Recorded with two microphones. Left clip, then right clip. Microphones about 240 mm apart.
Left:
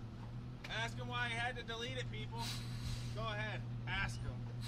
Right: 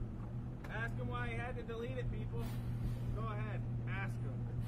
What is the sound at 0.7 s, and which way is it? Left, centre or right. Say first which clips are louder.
Speech: left 1 dB; centre.